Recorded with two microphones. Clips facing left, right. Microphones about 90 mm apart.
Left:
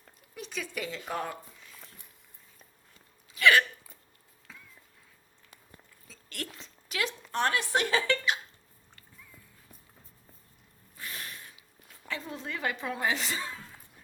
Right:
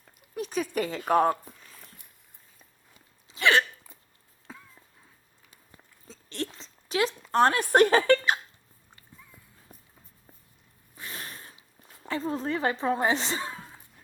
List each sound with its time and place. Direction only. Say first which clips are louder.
0.3 s speech: right 8 dB; 45° right (ahead or behind)
3.2 s hiccup: even; 30° right (ahead or behind)
6.1 s a sound: right 6 dB; 25° right (ahead or behind)
7.3 s speech: right 7 dB; 40° right (ahead or behind)
9.0 s dog: right 2 dB; 20° right (ahead or behind)
10.9 s zipper: right 1 dB; 30° right (ahead or behind)